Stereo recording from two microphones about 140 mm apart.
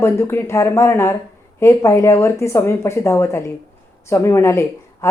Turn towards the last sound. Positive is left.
turn(degrees=20)  # may be behind; listen again after turning